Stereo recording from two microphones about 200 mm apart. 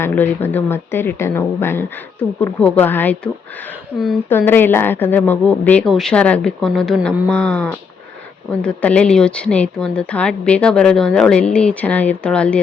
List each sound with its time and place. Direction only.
0.0 s a woman's voice: 10° left (ahead or behind)
3.9 s speech: 5° right (ahead or behind)
4.3 s a woman's voice: 10° left (ahead or behind)